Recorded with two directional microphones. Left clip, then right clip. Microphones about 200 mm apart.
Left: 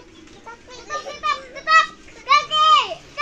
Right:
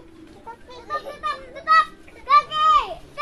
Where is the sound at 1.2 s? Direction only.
20° left (ahead or behind).